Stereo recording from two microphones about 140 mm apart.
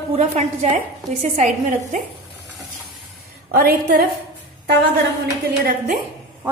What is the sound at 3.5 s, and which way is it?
Speech, 90° right.